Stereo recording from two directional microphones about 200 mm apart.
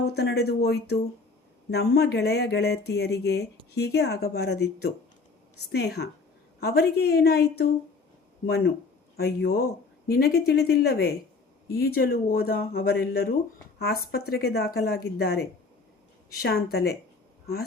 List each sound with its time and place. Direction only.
0.0 s speech: 55° left (ahead or behind)